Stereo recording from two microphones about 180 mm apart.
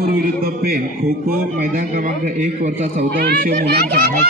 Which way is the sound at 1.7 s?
45° right (ahead or behind).